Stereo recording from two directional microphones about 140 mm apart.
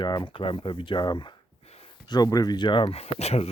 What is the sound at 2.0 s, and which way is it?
Speech, 30° left (ahead or behind).